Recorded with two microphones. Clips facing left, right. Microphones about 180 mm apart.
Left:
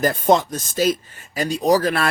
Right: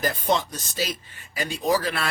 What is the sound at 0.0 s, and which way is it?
Speech, 45° left (ahead or behind).